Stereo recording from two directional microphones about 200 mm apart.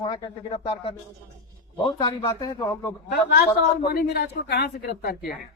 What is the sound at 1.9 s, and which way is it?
Speech, 20° left (ahead or behind).